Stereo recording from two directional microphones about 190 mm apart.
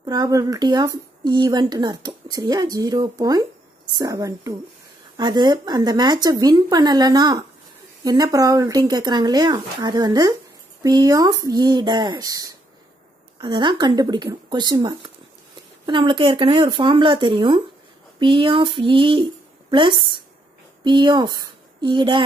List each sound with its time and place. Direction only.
0.0 s a woman's voice: 20° right (ahead or behind)